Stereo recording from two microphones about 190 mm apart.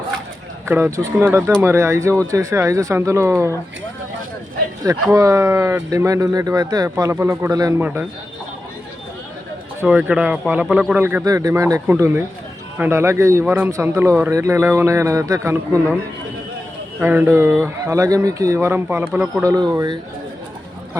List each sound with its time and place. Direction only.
0.6 s speech: 15° right (ahead or behind)
5.1 s speech: 15° right (ahead or behind)
9.8 s speech: 5° right (ahead or behind)
17.0 s speech: 10° right (ahead or behind)